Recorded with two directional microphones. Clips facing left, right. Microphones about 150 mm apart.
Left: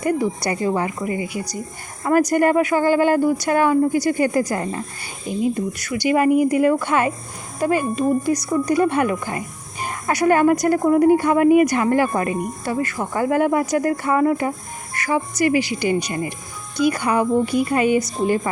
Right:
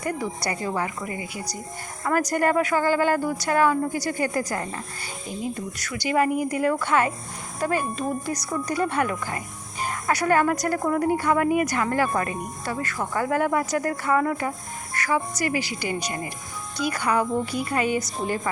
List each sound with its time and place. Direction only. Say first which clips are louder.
0.0 s speech: left 7 dB; 20° left (ahead or behind)